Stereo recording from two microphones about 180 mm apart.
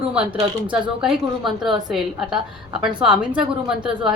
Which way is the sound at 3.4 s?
5° right (ahead or behind).